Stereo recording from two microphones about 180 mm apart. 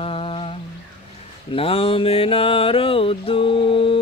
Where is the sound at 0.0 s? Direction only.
30° left (ahead or behind).